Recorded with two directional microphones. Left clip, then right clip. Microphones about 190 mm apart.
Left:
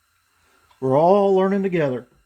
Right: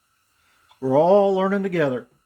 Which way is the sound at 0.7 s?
25° left (ahead or behind).